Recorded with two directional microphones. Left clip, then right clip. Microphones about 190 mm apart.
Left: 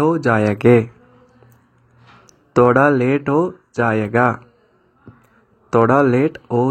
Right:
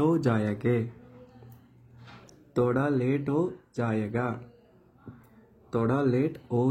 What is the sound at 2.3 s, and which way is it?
Speech, 30° left (ahead or behind).